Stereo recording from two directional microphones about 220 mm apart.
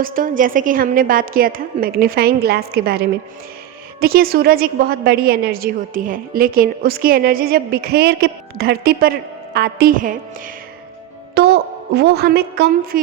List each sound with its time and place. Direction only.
0.0 s a woman's voice: 40° right (ahead or behind)